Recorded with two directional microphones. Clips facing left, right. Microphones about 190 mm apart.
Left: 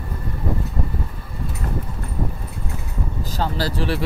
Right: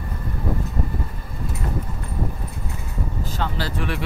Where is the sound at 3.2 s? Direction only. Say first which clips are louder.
Left 4 dB; 40° left (ahead or behind).